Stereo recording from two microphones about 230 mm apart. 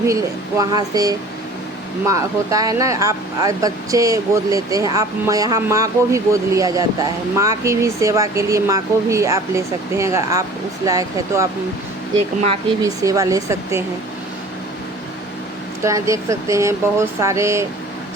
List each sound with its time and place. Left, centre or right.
0.1 s speech: centre
12.8 s speech: centre
15.8 s speech: centre